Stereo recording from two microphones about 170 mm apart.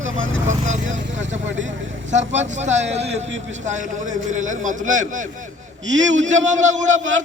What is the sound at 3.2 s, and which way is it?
Speech, 90° right.